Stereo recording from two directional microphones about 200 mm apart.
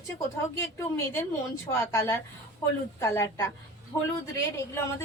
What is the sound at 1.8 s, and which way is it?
A woman's voice, 15° left (ahead or behind).